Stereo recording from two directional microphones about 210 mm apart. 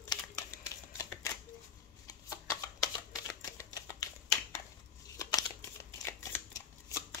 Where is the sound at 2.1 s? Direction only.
15° left (ahead or behind).